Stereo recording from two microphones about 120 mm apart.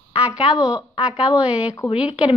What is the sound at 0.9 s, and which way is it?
Speech, 45° left (ahead or behind).